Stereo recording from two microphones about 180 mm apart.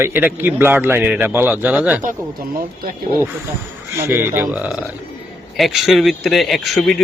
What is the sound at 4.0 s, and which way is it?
A man's voice, 15° right (ahead or behind).